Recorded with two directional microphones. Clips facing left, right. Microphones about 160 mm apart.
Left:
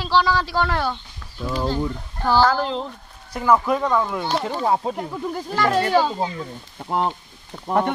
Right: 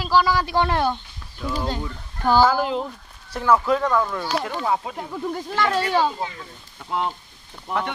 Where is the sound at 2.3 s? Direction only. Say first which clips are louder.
Right 1 dB; 10° right (ahead or behind).